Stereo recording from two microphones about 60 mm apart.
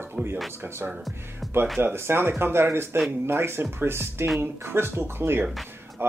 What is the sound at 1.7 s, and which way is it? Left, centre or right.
Speech, right.